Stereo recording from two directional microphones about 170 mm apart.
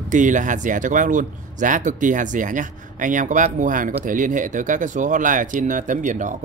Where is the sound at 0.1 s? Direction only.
50° right (ahead or behind).